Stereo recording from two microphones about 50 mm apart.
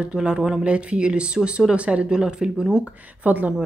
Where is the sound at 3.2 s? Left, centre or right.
Right.